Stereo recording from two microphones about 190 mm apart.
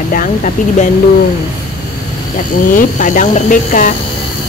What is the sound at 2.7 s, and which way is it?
Speech, 45° left (ahead or behind).